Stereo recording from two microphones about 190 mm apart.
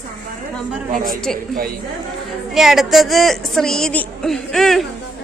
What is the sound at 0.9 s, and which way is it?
Speech, 50° right (ahead or behind).